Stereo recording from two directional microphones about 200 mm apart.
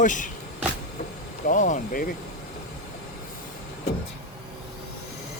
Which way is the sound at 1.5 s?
40° left (ahead or behind).